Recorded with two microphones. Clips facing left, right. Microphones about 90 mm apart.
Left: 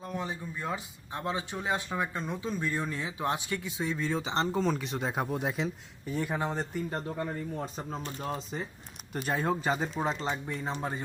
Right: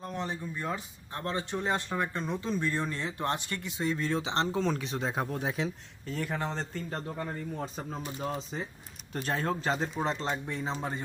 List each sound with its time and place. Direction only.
0.0 s speech: 5° left (ahead or behind)
6.1 s a man's voice: 15° left (ahead or behind)
7.3 s a man's voice: centre (ahead or behind)